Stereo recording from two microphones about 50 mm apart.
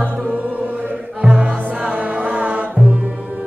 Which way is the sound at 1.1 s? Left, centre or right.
Centre.